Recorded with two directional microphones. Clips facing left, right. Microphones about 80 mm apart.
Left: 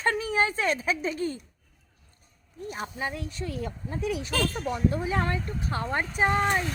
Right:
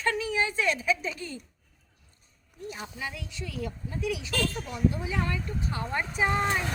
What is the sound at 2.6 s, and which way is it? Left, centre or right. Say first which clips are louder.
Speech: left 4 dB; left.